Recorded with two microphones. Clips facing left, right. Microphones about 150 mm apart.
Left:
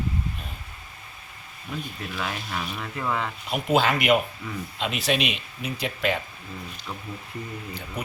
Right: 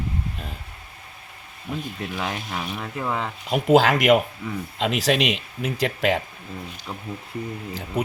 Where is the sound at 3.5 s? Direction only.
90° right.